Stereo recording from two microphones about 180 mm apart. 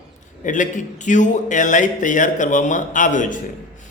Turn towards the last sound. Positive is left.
turn(degrees=45)  # may be behind; listen again after turning